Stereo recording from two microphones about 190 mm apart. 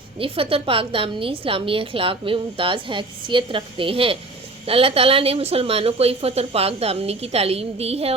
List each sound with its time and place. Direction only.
0.2 s a woman's voice: 30° right (ahead or behind)